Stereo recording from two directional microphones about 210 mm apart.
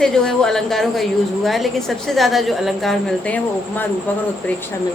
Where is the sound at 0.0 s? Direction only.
5° left (ahead or behind).